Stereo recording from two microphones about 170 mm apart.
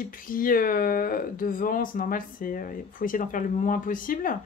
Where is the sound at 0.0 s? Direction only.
55° left (ahead or behind).